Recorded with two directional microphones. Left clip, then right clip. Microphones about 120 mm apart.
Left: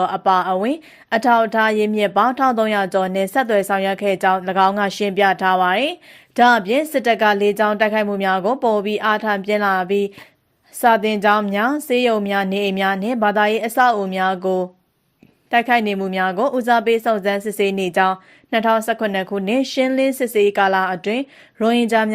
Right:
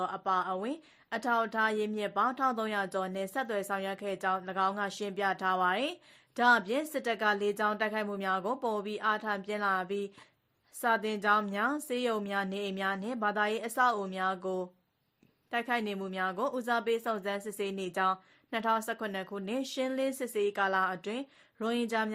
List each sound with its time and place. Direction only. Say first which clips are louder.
0.0 s a woman's voice: left 15 dB; 40° left (ahead or behind)